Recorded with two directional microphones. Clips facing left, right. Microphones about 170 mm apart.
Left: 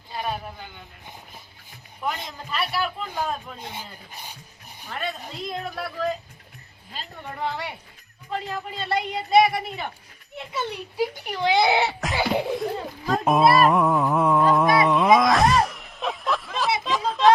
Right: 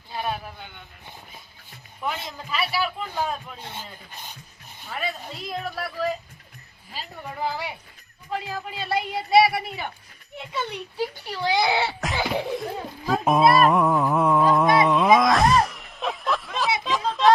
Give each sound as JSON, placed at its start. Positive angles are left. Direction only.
{"t": 0.1, "sound": "a sound", "side_deg": 0}
{"t": 2.0, "sound": "speech", "side_deg": 0}
{"t": 3.6, "sound": "speech", "side_deg": 10}
{"t": 4.1, "sound": "dog", "side_deg": 10}
{"t": 4.9, "sound": "speech", "side_deg": -5}
{"t": 11.1, "sound": "a child's voice", "side_deg": 15}
{"t": 11.9, "sound": "speech", "side_deg": 0}
{"t": 13.1, "sound": "a sound", "side_deg": 0}